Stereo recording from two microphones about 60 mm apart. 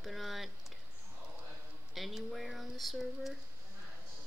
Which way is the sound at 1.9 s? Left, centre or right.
Centre.